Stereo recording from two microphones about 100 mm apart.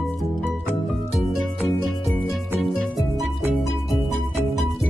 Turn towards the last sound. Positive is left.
turn(degrees=0)  # may be behind; listen again after turning